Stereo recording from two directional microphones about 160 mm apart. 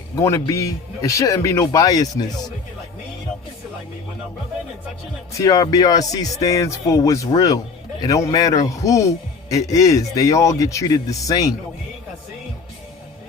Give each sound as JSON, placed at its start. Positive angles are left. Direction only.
{"t": 0.2, "sound": "a man's voice", "side_deg": 20}
{"t": 5.4, "sound": "a man's voice", "side_deg": 20}